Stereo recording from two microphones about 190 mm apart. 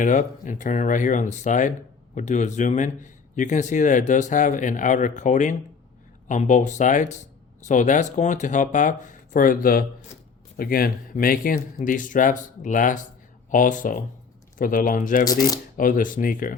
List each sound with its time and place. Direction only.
0.0 s a man's voice: 40° left (ahead or behind)